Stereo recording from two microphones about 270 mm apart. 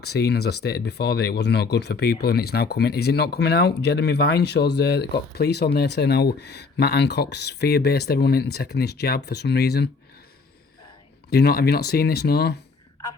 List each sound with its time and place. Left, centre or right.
0.0 s speech: left
11.3 s speech: left